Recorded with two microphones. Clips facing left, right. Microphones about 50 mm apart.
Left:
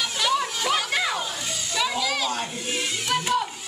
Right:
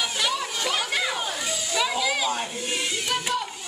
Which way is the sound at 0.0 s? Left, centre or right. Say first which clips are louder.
Left 3 dB; centre.